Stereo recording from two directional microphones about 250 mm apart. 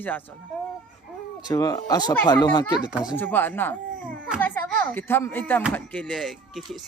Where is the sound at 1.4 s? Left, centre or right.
Centre.